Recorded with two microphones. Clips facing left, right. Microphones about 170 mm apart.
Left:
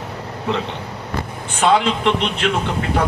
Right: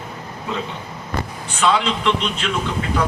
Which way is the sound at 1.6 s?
55° left (ahead or behind).